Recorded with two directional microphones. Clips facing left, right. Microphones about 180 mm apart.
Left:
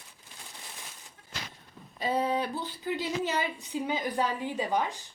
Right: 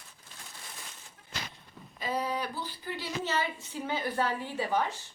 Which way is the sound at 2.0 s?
25° left (ahead or behind).